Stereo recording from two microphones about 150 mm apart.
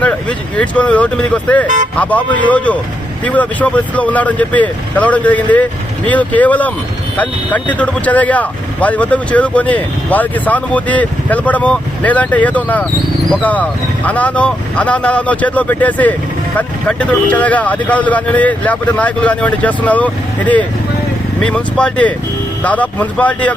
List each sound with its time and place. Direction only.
0.0 s speech: 10° left (ahead or behind)
1.6 s speech: 55° right (ahead or behind)
2.0 s speech: 10° left (ahead or behind)